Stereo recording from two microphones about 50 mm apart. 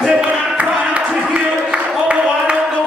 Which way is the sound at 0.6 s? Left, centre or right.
Right.